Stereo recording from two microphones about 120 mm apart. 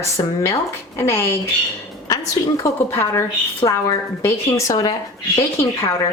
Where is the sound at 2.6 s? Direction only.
25° left (ahead or behind).